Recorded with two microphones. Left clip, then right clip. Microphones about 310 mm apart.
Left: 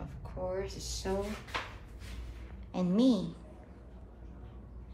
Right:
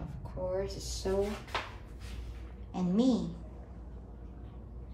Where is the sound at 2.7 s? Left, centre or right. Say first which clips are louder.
Left 1 dB; centre.